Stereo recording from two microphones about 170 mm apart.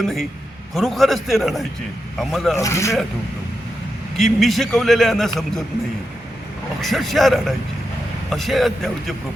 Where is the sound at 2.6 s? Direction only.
20° left (ahead or behind).